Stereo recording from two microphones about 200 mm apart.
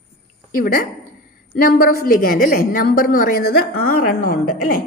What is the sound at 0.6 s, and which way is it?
A woman's voice, 45° left (ahead or behind).